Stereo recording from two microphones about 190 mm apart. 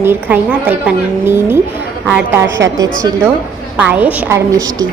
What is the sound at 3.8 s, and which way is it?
A woman's voice, 10° right (ahead or behind).